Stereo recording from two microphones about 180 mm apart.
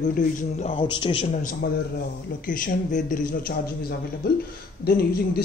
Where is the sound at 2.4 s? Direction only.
45° left (ahead or behind).